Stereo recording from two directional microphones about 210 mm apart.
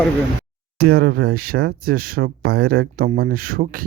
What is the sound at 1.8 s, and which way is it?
Speech, 45° right (ahead or behind).